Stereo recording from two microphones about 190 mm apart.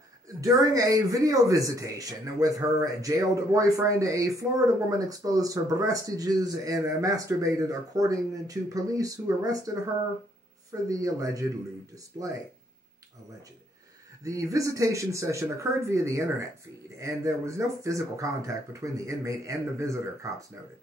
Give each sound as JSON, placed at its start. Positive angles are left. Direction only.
{"t": 0.4, "sound": "speech", "side_deg": -20}
{"t": 10.9, "sound": "speech", "side_deg": -15}
{"t": 14.2, "sound": "speech", "side_deg": -15}